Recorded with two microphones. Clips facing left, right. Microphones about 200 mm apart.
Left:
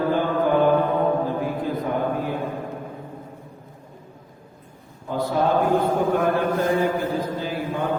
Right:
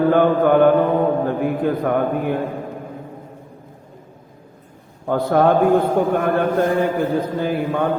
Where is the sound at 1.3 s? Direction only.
60° right (ahead or behind).